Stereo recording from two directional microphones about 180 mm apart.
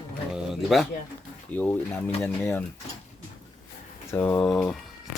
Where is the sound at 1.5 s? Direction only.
10° left (ahead or behind).